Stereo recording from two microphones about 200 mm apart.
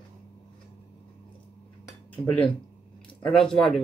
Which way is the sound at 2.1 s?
5° left (ahead or behind).